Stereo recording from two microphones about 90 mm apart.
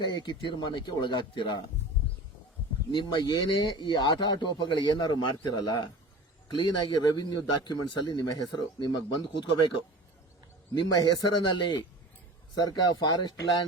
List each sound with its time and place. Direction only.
0.0 s a man's voice: 55° left (ahead or behind)
2.9 s a man's voice: 60° left (ahead or behind)
10.8 s a man's voice: 55° left (ahead or behind)